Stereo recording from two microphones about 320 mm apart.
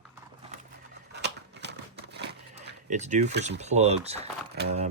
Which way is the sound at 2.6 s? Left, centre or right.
Right.